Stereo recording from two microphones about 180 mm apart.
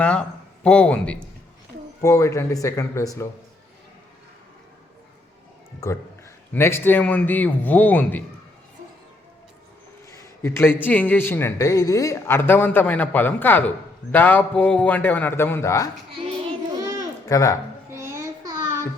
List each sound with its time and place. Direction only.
0.0 s a man's voice: 5° left (ahead or behind)
6.5 s a man's voice: 15° left (ahead or behind)
10.4 s a man's voice: 15° left (ahead or behind)
16.8 s a sound: 20° right (ahead or behind)
17.2 s speech: 20° left (ahead or behind)
17.9 s child singing: 15° right (ahead or behind)